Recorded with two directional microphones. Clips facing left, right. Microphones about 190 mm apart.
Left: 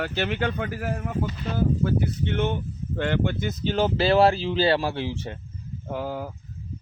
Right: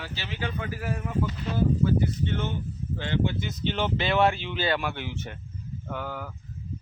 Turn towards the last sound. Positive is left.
turn(degrees=30)  # may be behind; listen again after turning